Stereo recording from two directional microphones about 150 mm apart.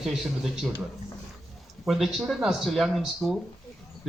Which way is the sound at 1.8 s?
Centre (ahead or behind).